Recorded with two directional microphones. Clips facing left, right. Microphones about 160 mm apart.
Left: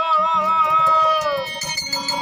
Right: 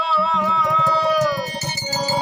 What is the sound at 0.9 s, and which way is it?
Music, 40° right (ahead or behind).